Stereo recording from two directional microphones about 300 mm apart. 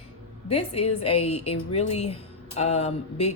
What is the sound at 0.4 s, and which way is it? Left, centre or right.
A woman's voice, centre.